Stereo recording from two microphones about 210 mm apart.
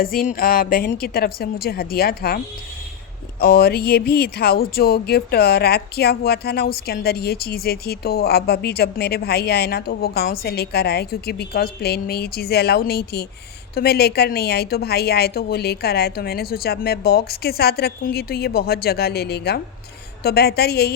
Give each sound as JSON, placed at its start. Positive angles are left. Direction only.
{"t": 0.0, "sound": "speech", "side_deg": 45}
{"t": 3.4, "sound": "speech", "side_deg": 45}